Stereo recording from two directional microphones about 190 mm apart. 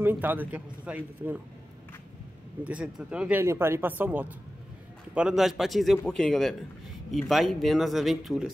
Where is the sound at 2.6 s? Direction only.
5° right (ahead or behind).